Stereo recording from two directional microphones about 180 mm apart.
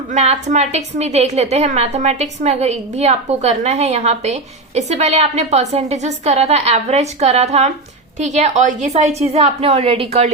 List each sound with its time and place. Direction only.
0.1 s a woman's voice: 40° right (ahead or behind)